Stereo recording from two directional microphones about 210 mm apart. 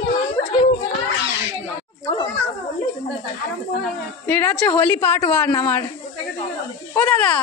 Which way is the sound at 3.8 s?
10° left (ahead or behind).